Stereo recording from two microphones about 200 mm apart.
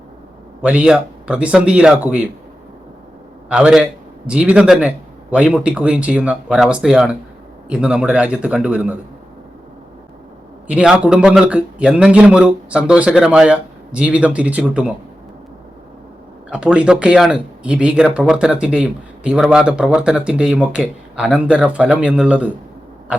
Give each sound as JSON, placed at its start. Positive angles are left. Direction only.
{"t": 0.6, "sound": "speech", "side_deg": -5}
{"t": 3.5, "sound": "speech", "side_deg": -5}
{"t": 10.7, "sound": "speech", "side_deg": -5}
{"t": 16.5, "sound": "speech", "side_deg": -5}